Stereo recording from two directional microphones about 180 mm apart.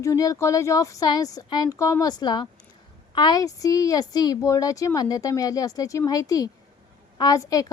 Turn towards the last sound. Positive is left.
turn(degrees=20)  # may be behind; listen again after turning